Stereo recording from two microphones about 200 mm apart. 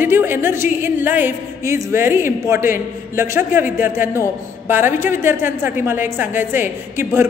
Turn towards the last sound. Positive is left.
turn(degrees=-10)  # may be behind; listen again after turning